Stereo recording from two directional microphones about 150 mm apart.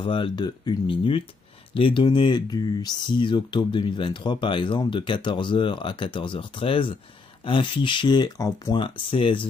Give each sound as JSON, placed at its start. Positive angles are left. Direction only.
{"t": 0.0, "sound": "speech", "side_deg": 35}